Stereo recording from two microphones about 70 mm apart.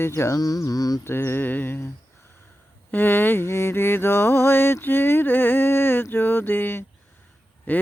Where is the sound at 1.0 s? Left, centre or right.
Left.